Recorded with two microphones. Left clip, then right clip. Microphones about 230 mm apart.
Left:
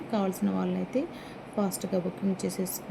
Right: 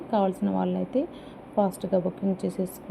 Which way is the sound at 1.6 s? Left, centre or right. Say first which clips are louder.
Right 5 dB; centre.